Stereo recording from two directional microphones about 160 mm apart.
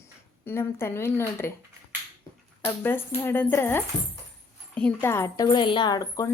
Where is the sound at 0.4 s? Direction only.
15° left (ahead or behind).